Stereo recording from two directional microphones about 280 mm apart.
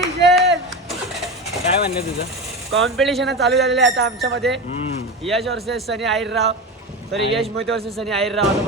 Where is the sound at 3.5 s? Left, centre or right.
Right.